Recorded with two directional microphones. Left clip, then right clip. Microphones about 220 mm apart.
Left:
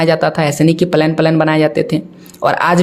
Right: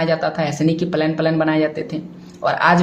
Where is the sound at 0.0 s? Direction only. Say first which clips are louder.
Left 6 dB; 50° left (ahead or behind).